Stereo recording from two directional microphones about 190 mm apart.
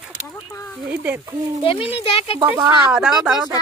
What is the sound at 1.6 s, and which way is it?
Speech, 30° left (ahead or behind).